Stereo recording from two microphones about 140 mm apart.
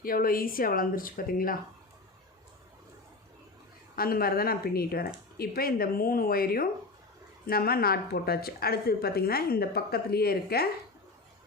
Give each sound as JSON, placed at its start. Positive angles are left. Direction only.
{"t": 0.0, "sound": "a woman's voice", "side_deg": 90}
{"t": 3.9, "sound": "a woman's voice", "side_deg": 90}